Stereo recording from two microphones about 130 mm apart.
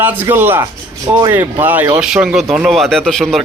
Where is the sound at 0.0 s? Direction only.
15° right (ahead or behind).